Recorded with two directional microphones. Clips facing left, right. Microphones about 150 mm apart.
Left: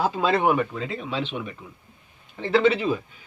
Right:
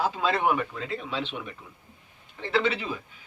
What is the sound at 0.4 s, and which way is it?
Speech, 15° left (ahead or behind).